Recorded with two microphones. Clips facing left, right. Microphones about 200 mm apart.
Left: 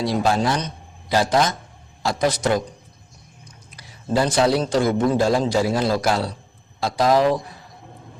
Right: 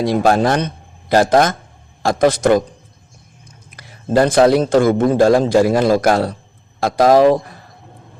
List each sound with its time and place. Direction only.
0.0 s a man's voice: 50° right (ahead or behind)
3.7 s a man's voice: 55° right (ahead or behind)